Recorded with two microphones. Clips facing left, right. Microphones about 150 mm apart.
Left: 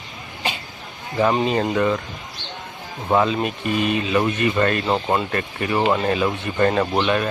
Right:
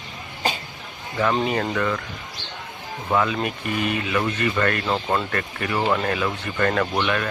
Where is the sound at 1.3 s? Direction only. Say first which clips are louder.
Left 3 dB; 20° left (ahead or behind).